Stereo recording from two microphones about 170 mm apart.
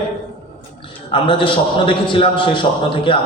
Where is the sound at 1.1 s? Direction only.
30° left (ahead or behind).